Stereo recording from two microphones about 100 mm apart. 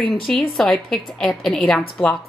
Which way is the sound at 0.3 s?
5° left (ahead or behind).